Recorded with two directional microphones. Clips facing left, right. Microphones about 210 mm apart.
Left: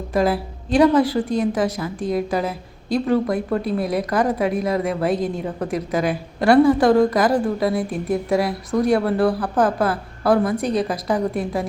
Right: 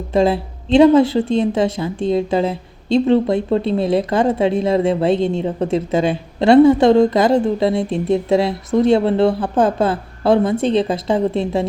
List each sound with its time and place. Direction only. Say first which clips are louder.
0.1 s a woman's voice: right 4 dB; 25° right (ahead or behind)